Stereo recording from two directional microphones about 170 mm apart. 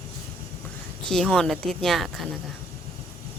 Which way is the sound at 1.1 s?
5° left (ahead or behind).